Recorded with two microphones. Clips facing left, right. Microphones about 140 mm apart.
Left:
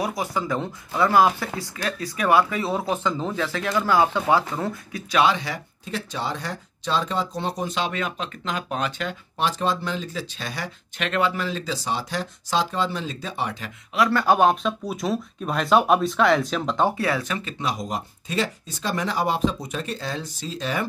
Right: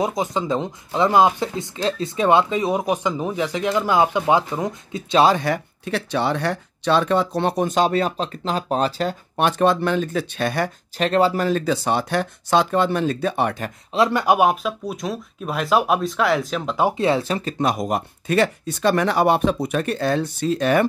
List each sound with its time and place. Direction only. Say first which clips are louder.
0.0 s speech: right 4 dB; 20° right (ahead or behind)
5.3 s speech: right 7 dB; 55° right (ahead or behind)
7.7 s speech: right 8 dB; 40° right (ahead or behind)
9.4 s speech: right 6 dB; 60° right (ahead or behind)
11.0 s speech: right 6 dB; 35° right (ahead or behind); by 13.7 s 55° right (ahead or behind)
13.9 s speech: right 2 dB; 20° right (ahead or behind); by 16.9 s 5° right (ahead or behind)
16.9 s speech: right 5 dB; 25° right (ahead or behind)
17.6 s speech: right 8 dB; 55° right (ahead or behind)